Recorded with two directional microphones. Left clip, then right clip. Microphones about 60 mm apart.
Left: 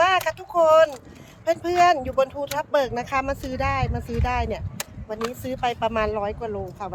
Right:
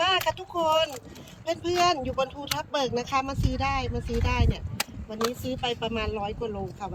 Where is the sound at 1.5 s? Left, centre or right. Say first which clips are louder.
Left 6 dB; left.